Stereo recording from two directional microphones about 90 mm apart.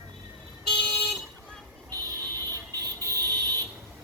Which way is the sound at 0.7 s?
10° left (ahead or behind).